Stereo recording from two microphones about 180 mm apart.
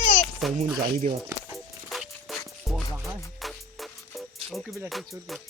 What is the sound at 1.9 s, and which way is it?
Music, centre (ahead or behind).